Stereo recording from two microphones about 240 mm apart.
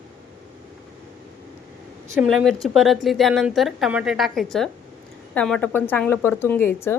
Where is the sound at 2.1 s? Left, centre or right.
Centre.